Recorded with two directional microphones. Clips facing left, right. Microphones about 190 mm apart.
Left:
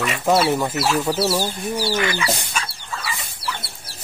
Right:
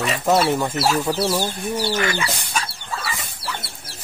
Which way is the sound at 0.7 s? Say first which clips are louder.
Right 1 dB; 40° right (ahead or behind).